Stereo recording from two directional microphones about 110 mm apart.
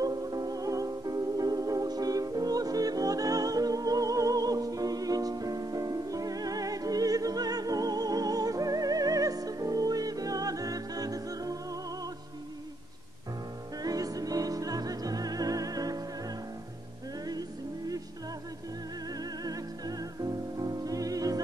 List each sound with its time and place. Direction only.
0.0 s music: 35° right (ahead or behind)
13.8 s music: 35° right (ahead or behind)
17.3 s music: 35° right (ahead or behind)
19.1 s music: 35° right (ahead or behind)